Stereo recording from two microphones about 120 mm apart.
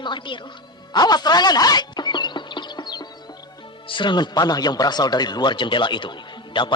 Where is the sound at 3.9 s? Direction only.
40° left (ahead or behind).